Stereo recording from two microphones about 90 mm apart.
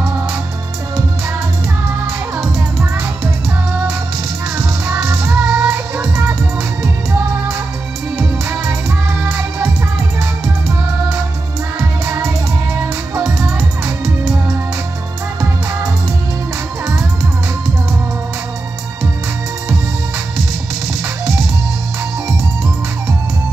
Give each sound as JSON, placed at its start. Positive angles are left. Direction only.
{"t": 5.3, "sound": "music", "side_deg": -25}
{"t": 8.2, "sound": "music", "side_deg": -25}
{"t": 13.1, "sound": "music", "side_deg": -30}